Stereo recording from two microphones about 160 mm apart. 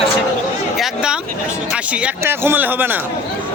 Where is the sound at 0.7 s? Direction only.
5° right (ahead or behind).